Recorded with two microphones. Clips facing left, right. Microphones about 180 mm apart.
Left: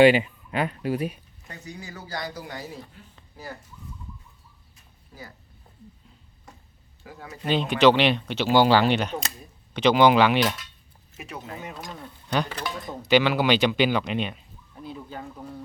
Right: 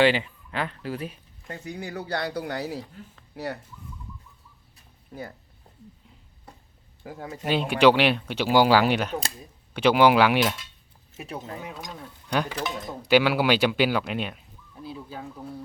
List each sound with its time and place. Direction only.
0.0 s speech: 15° left (ahead or behind)
1.6 s speech: 60° right (ahead or behind)
7.1 s speech: 45° right (ahead or behind)
7.4 s speech: 10° right (ahead or behind)
11.6 s speech: centre (ahead or behind)